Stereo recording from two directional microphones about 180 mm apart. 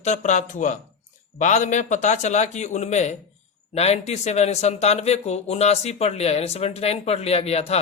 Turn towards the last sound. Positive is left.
turn(degrees=35)  # may be behind; listen again after turning